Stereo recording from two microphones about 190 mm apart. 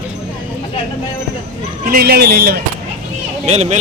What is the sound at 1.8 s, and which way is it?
Speech, 50° right (ahead or behind).